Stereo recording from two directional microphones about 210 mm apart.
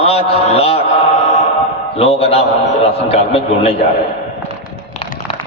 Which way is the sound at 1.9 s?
30° left (ahead or behind).